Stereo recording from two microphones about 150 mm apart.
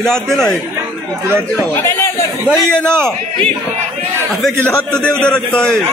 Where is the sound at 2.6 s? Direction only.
5° left (ahead or behind).